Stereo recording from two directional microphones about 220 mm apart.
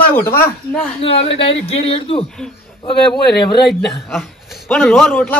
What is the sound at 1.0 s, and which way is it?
Speech, 25° left (ahead or behind).